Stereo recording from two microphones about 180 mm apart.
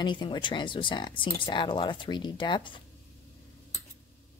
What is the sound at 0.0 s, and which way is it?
Speech, 25° left (ahead or behind).